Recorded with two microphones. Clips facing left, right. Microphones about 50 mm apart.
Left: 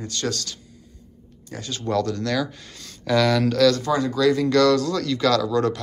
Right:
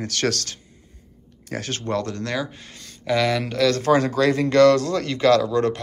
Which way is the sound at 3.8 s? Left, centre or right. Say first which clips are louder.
Right 4 dB; right.